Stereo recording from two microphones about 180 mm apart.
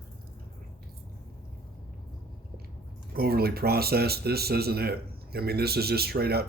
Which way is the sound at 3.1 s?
60° right (ahead or behind).